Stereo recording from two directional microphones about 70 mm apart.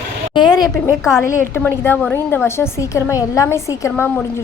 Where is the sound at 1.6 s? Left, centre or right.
Left.